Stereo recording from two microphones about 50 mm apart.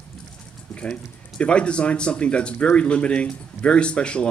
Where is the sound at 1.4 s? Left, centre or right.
Left.